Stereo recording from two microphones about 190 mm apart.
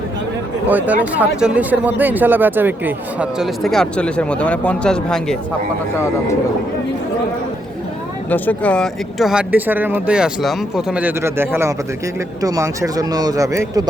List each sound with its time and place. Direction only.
0.7 s a man's voice: 10° right (ahead or behind)
8.3 s a man's voice: 10° left (ahead or behind); by 13.8 s 15° right (ahead or behind)